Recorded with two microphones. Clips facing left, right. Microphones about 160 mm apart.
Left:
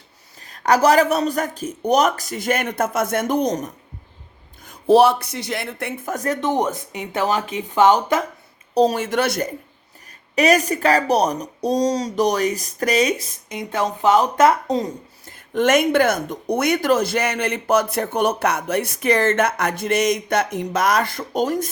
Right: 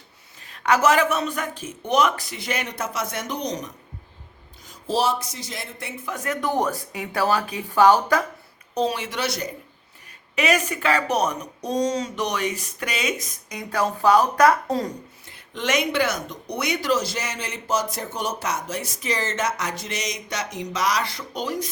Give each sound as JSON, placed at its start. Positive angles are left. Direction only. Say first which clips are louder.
{"t": 0.3, "sound": "speech", "louder": "left 4 dB", "side_deg": 40}
{"t": 6.4, "sound": "speech", "louder": "even", "side_deg": 20}
{"t": 8.7, "sound": "speech", "louder": "left 7 dB", "side_deg": 40}
{"t": 10.3, "sound": "speech", "louder": "left 6 dB", "side_deg": 40}
{"t": 15.2, "sound": "speech", "louder": "left 12 dB", "side_deg": 50}